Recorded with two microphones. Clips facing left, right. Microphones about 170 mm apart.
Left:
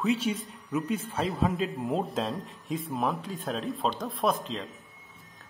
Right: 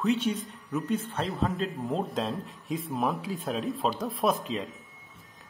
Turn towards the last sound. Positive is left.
turn(degrees=0)  # may be behind; listen again after turning